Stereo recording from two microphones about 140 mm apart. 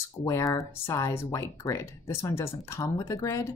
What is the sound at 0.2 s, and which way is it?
Speech, 20° left (ahead or behind).